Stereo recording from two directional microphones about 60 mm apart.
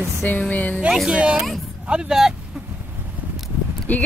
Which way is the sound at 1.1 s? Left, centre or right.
Centre.